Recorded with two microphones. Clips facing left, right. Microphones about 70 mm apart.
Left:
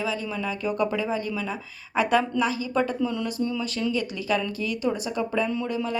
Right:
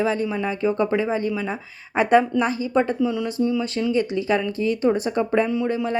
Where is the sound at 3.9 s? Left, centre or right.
Right.